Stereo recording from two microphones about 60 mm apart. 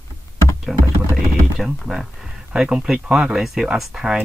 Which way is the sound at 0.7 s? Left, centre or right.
Centre.